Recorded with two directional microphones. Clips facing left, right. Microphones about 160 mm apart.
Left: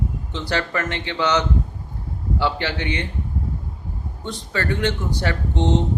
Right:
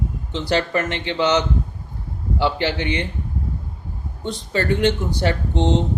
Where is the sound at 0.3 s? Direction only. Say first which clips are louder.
Right 4 dB; 25° right (ahead or behind).